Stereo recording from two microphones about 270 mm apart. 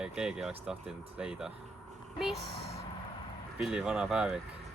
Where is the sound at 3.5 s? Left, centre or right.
Centre.